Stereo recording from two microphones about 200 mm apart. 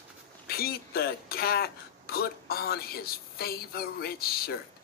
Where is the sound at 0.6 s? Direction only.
50° left (ahead or behind).